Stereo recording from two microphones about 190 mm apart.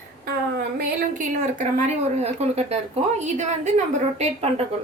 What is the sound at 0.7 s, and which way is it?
Speech, 40° right (ahead or behind).